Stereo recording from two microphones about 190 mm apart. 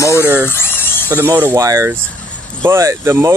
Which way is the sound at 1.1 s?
10° right (ahead or behind).